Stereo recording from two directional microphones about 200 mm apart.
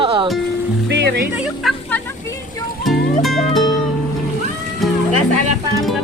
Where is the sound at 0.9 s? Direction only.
60° right (ahead or behind).